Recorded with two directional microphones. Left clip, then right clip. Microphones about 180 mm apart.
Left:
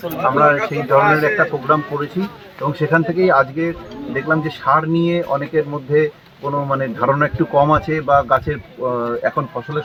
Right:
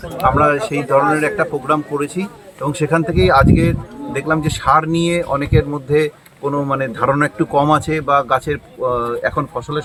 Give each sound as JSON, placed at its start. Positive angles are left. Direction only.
{"t": 0.2, "sound": "a man's voice", "side_deg": -35}